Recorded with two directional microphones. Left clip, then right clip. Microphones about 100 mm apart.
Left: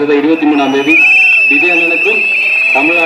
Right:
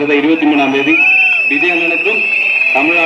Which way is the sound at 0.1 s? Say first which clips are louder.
Right 1 dB; 10° right (ahead or behind).